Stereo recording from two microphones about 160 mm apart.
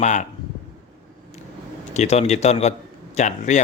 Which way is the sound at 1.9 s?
45° left (ahead or behind).